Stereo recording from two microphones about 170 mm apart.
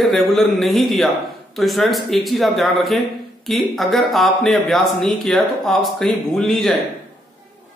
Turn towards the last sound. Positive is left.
turn(degrees=0)  # may be behind; listen again after turning